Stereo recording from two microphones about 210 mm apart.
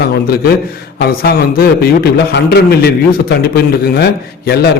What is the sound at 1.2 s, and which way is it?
A man's voice, 45° left (ahead or behind).